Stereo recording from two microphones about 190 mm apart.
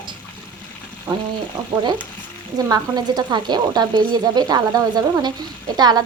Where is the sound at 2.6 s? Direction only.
20° right (ahead or behind).